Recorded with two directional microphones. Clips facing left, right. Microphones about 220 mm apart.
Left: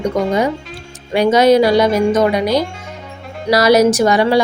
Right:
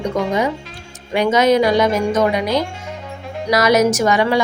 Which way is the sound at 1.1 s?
35° left (ahead or behind).